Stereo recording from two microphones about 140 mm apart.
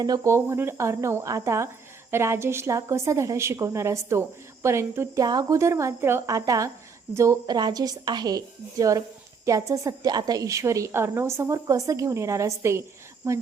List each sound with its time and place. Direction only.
0.0 s speech: 25° right (ahead or behind)